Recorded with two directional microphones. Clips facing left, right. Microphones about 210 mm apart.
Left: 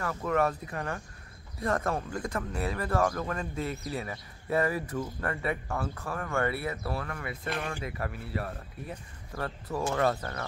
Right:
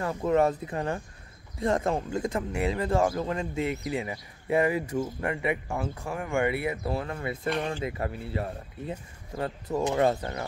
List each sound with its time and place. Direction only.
0.0 s speech: 25° right (ahead or behind)